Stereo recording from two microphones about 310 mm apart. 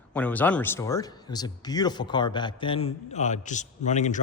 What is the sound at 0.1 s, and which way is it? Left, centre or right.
Speech, centre.